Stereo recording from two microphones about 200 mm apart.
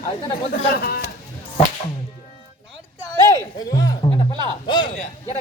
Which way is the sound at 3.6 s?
15° left (ahead or behind).